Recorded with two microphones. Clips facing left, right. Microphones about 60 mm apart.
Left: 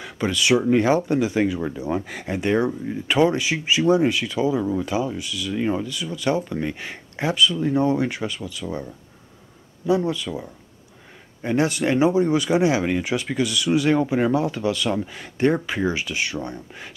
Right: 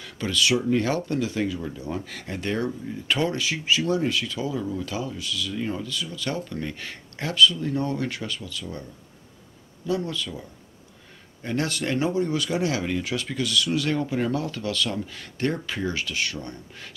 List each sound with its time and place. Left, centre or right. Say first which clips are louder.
0.0 s speech: left 2 dB; left
9.8 s speech: left 6 dB; centre